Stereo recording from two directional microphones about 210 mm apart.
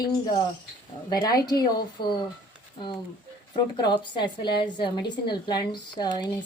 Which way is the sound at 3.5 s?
20° left (ahead or behind).